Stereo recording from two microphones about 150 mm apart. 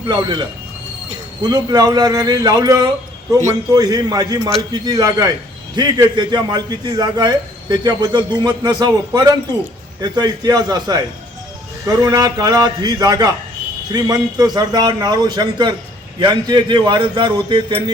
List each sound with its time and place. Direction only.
0.1 s a man's voice: 30° right (ahead or behind)